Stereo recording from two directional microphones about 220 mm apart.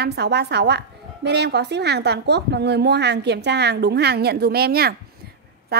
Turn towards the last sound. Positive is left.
turn(degrees=-45)  # may be behind; listen again after turning